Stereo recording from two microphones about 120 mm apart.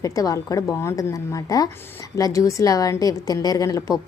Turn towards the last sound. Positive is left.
turn(degrees=30)  # may be behind; listen again after turning